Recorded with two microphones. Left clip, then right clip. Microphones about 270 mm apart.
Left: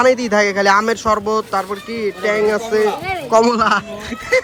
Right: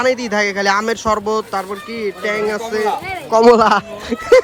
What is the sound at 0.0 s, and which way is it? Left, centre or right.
Speech, centre.